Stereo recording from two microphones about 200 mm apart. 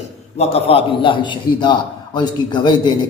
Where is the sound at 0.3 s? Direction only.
30° left (ahead or behind).